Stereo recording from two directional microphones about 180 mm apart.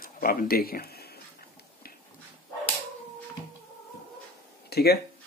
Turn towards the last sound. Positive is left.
turn(degrees=65)  # may be behind; listen again after turning